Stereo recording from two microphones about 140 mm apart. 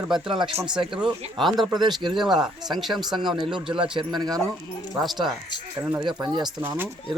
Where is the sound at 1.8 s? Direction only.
35° right (ahead or behind).